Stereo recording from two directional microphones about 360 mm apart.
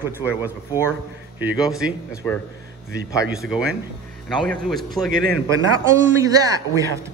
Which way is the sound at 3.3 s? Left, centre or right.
Centre.